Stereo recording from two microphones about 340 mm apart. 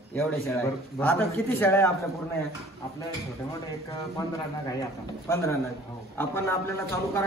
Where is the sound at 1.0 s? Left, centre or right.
Centre.